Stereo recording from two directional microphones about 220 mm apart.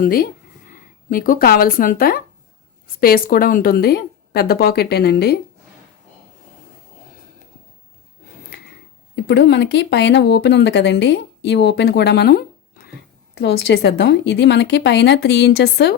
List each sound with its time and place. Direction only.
0.0 s speech: 40° left (ahead or behind)
8.3 s snort: 45° left (ahead or behind)
9.1 s speech: 50° left (ahead or behind)